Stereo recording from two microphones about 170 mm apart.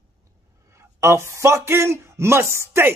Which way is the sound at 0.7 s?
15° right (ahead or behind).